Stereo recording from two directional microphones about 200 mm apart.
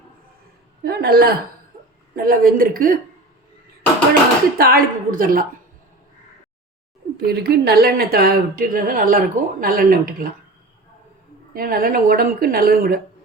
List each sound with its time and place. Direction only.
0.9 s speech: 50° right (ahead or behind)
4.5 s speech: 50° right (ahead or behind)
7.2 s speech: 50° right (ahead or behind)
11.5 s speech: 45° right (ahead or behind)